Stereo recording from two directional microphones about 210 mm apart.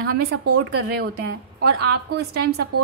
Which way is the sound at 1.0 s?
50° right (ahead or behind).